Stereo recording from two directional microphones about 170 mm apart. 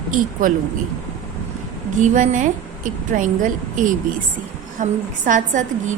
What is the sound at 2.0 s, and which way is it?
A woman's voice, 45° right (ahead or behind).